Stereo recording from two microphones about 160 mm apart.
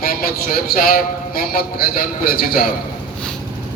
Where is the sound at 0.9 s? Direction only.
70° left (ahead or behind).